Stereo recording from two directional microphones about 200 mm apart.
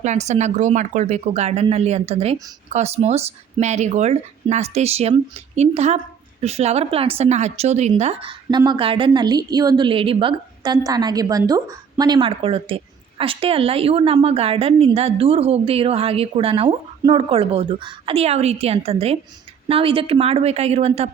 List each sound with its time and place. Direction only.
0.0 s speech: 35° right (ahead or behind)